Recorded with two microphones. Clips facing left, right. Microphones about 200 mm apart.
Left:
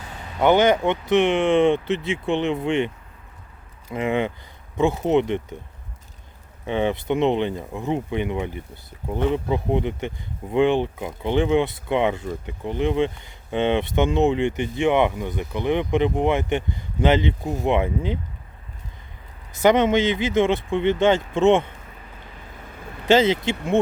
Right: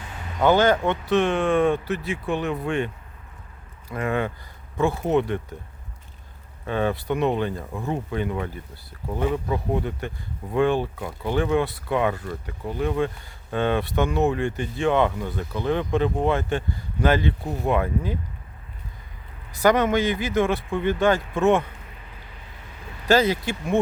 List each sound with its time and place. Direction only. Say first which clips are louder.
0.4 s speech: left 2 dB; 20° left (ahead or behind)
6.7 s speech: left 2 dB; 20° left (ahead or behind)
19.6 s speech: left 2 dB; 20° left (ahead or behind)
23.0 s speech: left 3 dB; 25° left (ahead or behind)